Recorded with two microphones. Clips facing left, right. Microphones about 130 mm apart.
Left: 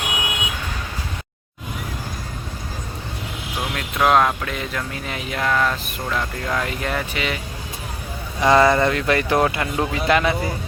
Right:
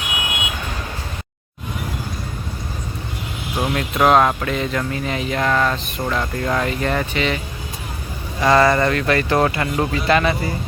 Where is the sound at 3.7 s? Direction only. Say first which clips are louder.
Right 2 dB; 5° right (ahead or behind).